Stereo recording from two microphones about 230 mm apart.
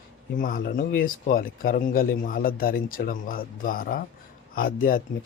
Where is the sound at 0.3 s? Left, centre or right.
Left.